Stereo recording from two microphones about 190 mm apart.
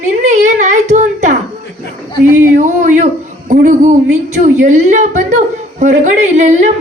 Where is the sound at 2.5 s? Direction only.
40° right (ahead or behind).